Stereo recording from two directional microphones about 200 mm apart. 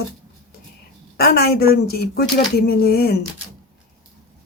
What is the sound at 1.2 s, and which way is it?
Speech, 50° left (ahead or behind).